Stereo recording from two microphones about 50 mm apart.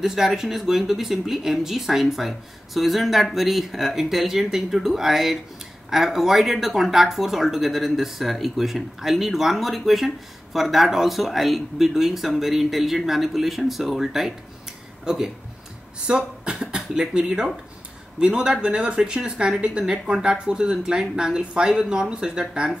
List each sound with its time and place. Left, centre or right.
0.0 s speech: centre